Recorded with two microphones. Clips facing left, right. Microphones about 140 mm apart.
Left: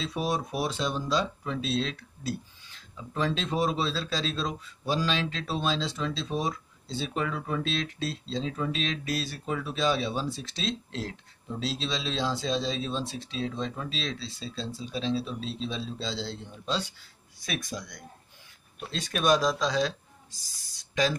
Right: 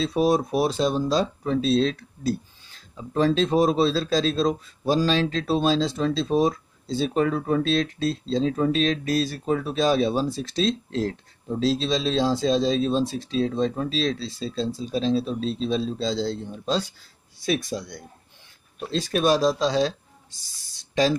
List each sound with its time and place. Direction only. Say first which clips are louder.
0.0 s speech: right 9 dB; 35° right (ahead or behind)
17.4 s speech: right 9 dB; 30° right (ahead or behind)